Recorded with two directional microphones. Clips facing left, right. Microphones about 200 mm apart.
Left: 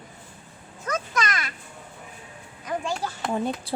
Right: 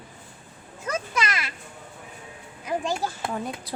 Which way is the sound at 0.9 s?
10° right (ahead or behind).